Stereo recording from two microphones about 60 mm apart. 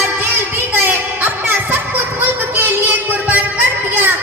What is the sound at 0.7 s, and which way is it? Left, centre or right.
Music, right.